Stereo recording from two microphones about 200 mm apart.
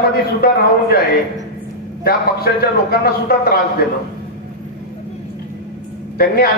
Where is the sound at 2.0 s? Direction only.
50° left (ahead or behind).